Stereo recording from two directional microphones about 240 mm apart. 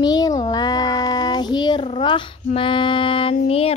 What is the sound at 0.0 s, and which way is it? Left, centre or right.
Child singing, centre.